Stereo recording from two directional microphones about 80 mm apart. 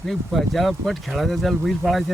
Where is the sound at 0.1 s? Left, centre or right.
Centre.